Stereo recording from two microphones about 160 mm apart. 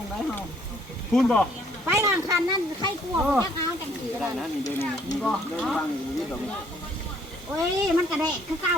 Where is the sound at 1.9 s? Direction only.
20° right (ahead or behind).